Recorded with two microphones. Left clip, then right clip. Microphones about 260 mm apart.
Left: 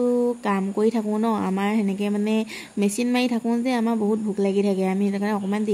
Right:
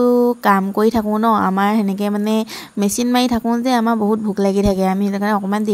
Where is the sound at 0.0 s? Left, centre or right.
Right.